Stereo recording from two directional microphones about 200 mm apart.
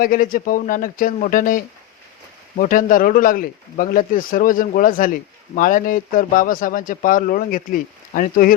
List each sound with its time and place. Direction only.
0.0 s speech: 45° left (ahead or behind)